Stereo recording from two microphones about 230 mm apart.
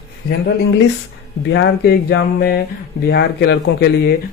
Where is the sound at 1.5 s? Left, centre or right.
Left.